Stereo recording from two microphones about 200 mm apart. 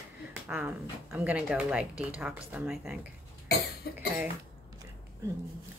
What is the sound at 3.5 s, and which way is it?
Cough, 55° left (ahead or behind).